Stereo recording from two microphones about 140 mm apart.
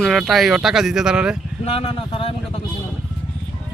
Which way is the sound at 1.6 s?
45° left (ahead or behind).